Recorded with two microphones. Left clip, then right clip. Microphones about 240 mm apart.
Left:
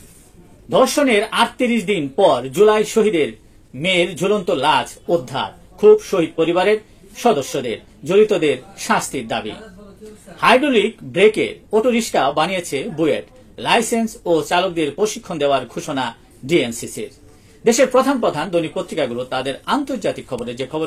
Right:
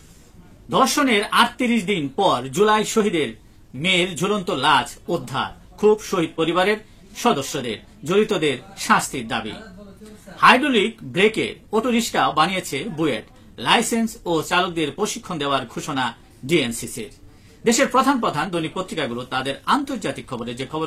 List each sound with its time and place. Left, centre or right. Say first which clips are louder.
0.7 s speech: left 3 dB; centre